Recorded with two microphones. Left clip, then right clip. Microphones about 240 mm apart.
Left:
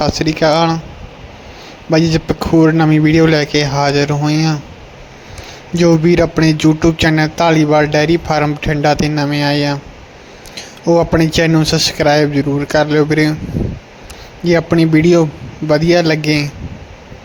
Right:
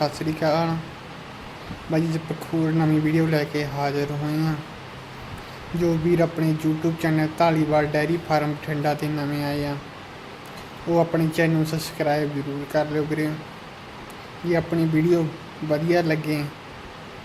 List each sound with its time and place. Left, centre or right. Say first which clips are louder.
0.0 s a man's voice: left 10 dB; left
1.9 s a man's voice: left 12 dB; left
5.8 s a man's voice: left 10 dB; left
10.8 s a man's voice: left 10 dB; left
14.4 s a man's voice: left 11 dB; left